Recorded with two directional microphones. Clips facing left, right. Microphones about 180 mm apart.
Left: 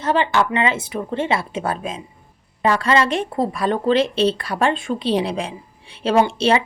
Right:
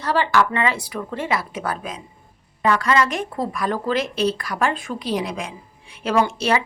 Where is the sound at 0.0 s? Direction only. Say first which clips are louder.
Left 1 dB; 20° left (ahead or behind).